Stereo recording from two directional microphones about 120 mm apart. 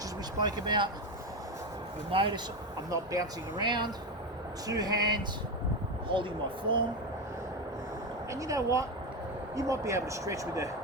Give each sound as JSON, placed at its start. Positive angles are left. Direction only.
{"t": 0.3, "sound": "speech", "side_deg": -35}
{"t": 2.1, "sound": "speech", "side_deg": -45}
{"t": 2.9, "sound": "speech", "side_deg": -30}
{"t": 8.3, "sound": "speech", "side_deg": -25}